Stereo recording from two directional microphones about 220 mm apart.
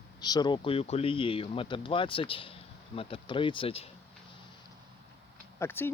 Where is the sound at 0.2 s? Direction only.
20° left (ahead or behind).